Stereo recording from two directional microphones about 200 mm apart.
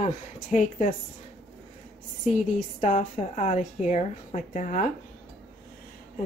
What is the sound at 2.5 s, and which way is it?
A woman's voice, 35° left (ahead or behind).